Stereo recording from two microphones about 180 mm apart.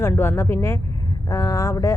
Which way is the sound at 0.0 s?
15° left (ahead or behind).